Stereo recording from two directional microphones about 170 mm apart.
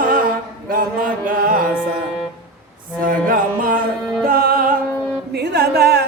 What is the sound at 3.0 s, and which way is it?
Mantra, 55° right (ahead or behind).